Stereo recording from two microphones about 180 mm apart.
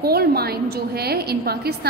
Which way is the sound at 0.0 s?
60° right (ahead or behind).